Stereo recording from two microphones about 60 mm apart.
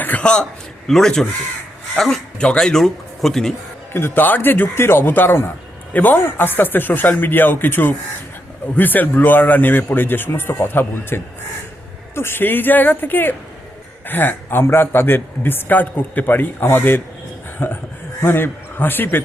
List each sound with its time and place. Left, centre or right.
0.0 s a sound: left
0.9 s speech: centre
2.4 s speech: centre
3.9 s a man's voice: left